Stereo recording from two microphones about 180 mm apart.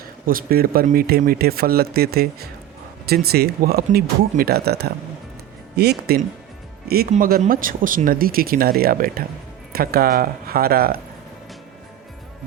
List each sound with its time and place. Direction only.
0.3 s speech: 55° right (ahead or behind)